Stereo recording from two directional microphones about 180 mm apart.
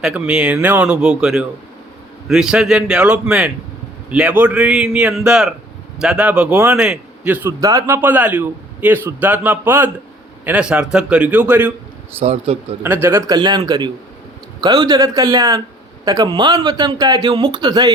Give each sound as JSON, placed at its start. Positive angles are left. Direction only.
{"t": 0.0, "sound": "a man's voice", "side_deg": -5}
{"t": 12.2, "sound": "speech", "side_deg": -35}
{"t": 12.8, "sound": "speech", "side_deg": -15}